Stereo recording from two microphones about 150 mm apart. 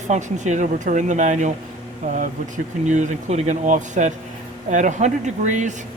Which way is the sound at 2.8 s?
55° right (ahead or behind).